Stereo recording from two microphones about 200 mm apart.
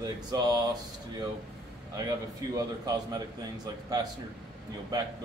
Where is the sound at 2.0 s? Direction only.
15° right (ahead or behind).